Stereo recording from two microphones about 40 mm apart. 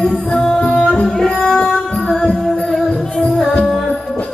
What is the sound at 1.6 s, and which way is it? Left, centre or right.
Music, left.